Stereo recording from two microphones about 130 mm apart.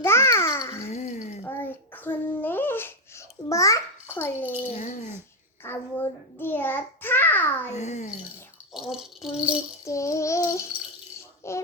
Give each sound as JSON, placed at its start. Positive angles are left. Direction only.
{"t": 0.0, "sound": "babbling", "side_deg": 20}
{"t": 0.9, "sound": "a sound", "side_deg": 60}
{"t": 1.5, "sound": "babbling", "side_deg": 15}
{"t": 4.7, "sound": "a child's voice", "side_deg": 60}
{"t": 5.6, "sound": "a child's voice", "side_deg": 15}
{"t": 7.7, "sound": "a child's voice", "side_deg": 60}
{"t": 8.7, "sound": "speech", "side_deg": -5}
{"t": 9.8, "sound": "child singing", "side_deg": 25}